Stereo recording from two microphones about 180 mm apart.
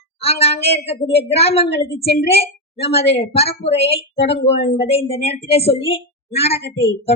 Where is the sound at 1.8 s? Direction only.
35° left (ahead or behind).